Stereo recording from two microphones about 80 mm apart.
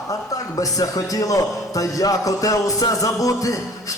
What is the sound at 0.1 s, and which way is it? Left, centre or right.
Speech, left.